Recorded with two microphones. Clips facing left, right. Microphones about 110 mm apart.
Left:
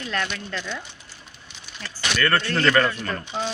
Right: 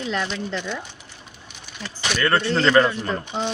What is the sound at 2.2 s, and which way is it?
Speech, 15° right (ahead or behind).